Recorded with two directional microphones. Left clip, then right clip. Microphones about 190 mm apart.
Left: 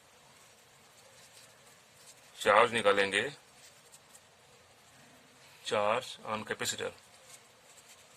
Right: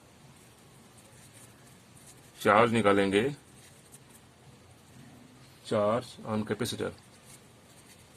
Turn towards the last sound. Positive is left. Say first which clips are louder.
# right 2 dB
turn(degrees=20)  # may be behind; listen again after turning